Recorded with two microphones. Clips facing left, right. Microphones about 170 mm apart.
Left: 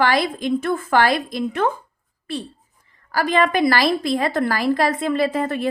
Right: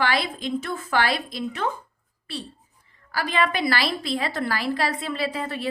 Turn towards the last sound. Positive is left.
turn(degrees=50)  # may be behind; listen again after turning